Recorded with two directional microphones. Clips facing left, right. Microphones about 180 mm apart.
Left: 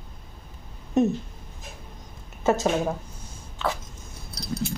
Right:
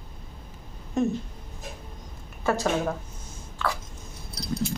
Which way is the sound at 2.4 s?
20° left (ahead or behind).